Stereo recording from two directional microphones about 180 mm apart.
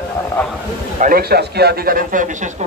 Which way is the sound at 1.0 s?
55° right (ahead or behind).